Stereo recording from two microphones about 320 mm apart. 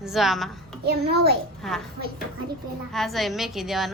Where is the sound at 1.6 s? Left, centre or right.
Centre.